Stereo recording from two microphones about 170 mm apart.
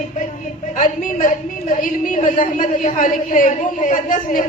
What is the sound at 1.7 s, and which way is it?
A man's voice, 45° left (ahead or behind).